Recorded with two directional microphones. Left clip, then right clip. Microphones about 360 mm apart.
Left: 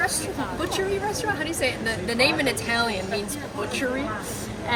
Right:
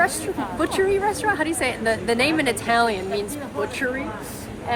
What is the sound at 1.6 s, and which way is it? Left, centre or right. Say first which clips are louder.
Speech: right 2 dB; centre.